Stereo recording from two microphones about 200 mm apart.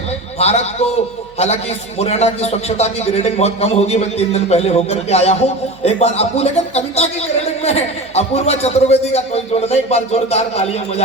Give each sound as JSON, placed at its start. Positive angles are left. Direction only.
{"t": 0.3, "sound": "a man's voice", "side_deg": 30}
{"t": 2.0, "sound": "a man's voice", "side_deg": 35}